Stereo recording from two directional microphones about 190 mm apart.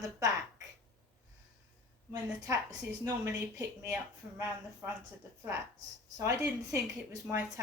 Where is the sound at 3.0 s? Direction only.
15° right (ahead or behind).